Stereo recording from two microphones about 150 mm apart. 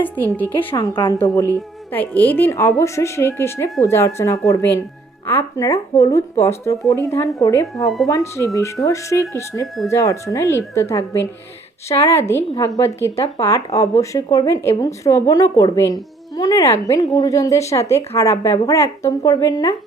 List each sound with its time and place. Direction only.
0.8 s speech: 25° left (ahead or behind)
1.9 s a woman's voice: 10° left (ahead or behind)
7.8 s speech: centre (ahead or behind)
8.0 s speech: 20° left (ahead or behind)